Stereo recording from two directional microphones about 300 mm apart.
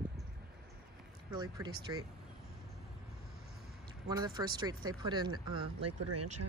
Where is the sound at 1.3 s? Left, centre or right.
Centre.